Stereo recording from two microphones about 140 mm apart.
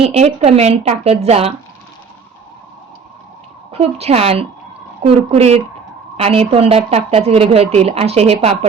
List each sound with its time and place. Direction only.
0.0 s a woman's voice: 45° right (ahead or behind)
3.7 s a woman's voice: 45° right (ahead or behind)